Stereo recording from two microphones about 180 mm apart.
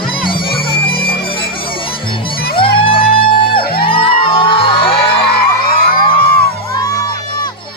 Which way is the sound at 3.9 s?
30° left (ahead or behind).